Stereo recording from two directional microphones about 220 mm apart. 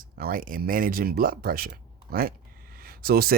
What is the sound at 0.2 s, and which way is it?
Speech, 40° right (ahead or behind).